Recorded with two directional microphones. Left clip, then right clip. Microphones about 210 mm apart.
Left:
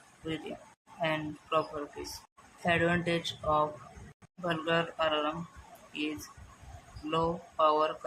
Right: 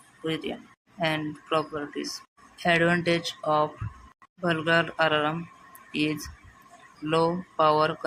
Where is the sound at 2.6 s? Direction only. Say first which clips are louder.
Right 6 dB; 20° right (ahead or behind).